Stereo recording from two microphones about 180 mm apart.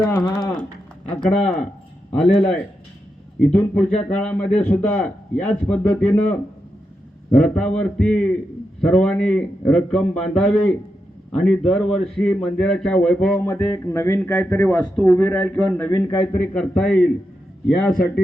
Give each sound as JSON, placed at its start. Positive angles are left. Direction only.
{"t": 0.0, "sound": "speech", "side_deg": 20}
{"t": 1.0, "sound": "a man's voice", "side_deg": 5}
{"t": 3.3, "sound": "a man's voice", "side_deg": 5}
{"t": 13.5, "sound": "a man's voice", "side_deg": 15}